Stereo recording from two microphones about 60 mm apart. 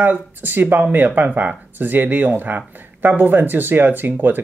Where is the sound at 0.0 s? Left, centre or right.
Right.